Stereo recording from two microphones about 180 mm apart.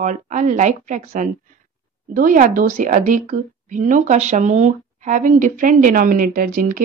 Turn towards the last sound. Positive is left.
turn(degrees=-55)  # may be behind; listen again after turning